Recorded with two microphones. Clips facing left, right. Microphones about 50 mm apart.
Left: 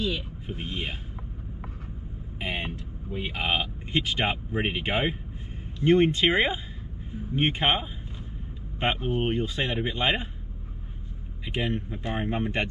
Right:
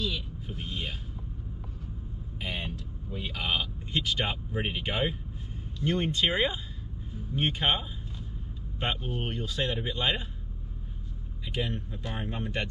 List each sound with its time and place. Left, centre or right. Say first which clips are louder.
0.0 s speech: left 4 dB; left
2.4 s vehicle: left 4 dB; left
5.8 s speech: left 7 dB; left
11.4 s speech: left 4 dB; left